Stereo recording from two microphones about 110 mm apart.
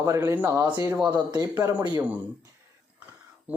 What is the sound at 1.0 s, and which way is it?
Speech, 40° right (ahead or behind).